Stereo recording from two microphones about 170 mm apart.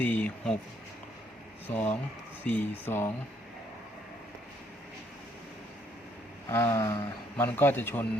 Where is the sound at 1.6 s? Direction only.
10° left (ahead or behind).